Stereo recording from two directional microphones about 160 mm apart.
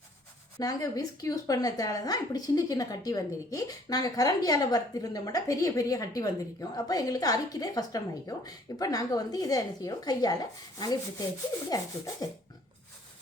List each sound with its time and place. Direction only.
0.6 s a woman's voice: 20° left (ahead or behind)